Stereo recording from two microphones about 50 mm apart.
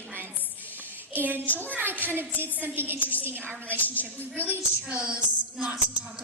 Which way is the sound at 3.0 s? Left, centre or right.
Left.